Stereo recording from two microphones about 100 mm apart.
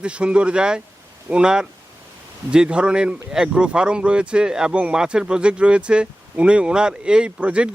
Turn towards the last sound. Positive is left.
turn(degrees=-10)  # may be behind; listen again after turning